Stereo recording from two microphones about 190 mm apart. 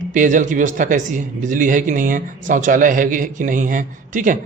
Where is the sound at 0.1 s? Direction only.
40° right (ahead or behind).